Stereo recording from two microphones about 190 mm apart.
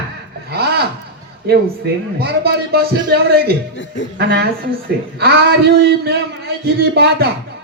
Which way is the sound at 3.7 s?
80° left.